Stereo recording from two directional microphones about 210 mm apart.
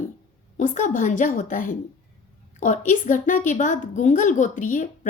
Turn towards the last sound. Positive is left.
turn(degrees=35)  # may be behind; listen again after turning